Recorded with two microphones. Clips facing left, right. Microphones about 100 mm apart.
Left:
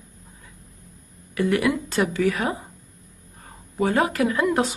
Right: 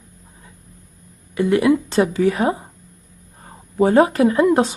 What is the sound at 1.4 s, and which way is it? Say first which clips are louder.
Speech: right 6 dB; 25° right (ahead or behind).